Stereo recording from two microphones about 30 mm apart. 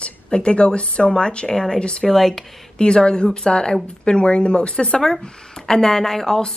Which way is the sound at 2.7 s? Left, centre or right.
Left.